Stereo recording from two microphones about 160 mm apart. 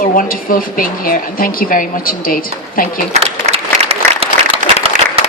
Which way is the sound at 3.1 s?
40° right (ahead or behind).